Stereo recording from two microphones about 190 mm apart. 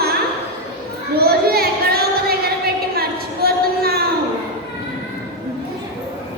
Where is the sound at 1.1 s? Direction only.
55° right (ahead or behind).